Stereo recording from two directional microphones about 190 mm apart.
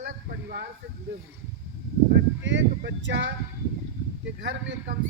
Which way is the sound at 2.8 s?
70° right (ahead or behind).